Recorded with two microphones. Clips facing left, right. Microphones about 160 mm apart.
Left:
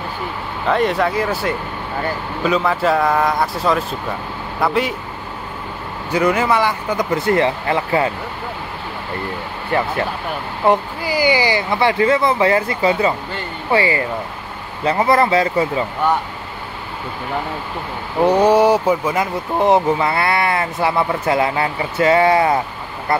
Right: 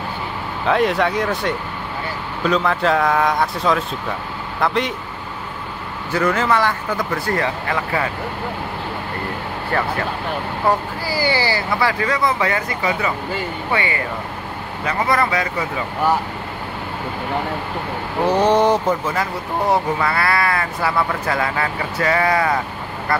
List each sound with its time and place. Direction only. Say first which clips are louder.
0.7 s a man's voice: even; centre (ahead or behind)
6.1 s speech: left 2 dB; 15° left (ahead or behind)
9.7 s speech: left 3 dB; 20° left (ahead or behind)
18.3 s speech: left 2 dB; 10° left (ahead or behind); by 22.6 s 25° left (ahead or behind)